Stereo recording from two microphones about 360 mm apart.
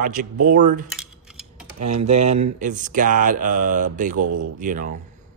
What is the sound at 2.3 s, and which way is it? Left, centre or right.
A man's voice, centre.